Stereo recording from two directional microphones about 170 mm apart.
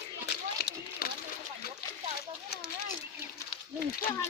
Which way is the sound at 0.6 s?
60° left (ahead or behind).